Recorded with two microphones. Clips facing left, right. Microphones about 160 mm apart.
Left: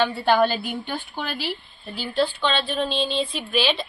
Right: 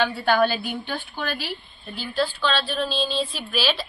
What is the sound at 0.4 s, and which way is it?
Speech, 10° left (ahead or behind).